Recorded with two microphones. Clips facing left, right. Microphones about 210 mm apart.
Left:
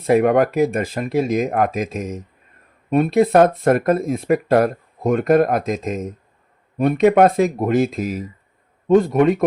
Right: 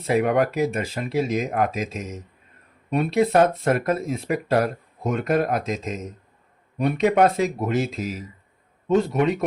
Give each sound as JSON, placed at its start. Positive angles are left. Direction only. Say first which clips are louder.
{"t": 0.1, "sound": "speech", "louder": "left 5 dB", "side_deg": 50}